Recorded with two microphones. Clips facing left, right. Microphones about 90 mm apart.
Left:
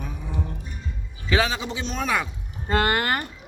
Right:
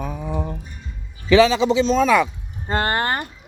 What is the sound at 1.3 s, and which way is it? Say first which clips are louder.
A man's voice: right 10 dB; 90° right.